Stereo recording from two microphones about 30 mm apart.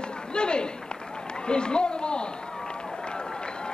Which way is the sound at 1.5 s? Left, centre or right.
Left.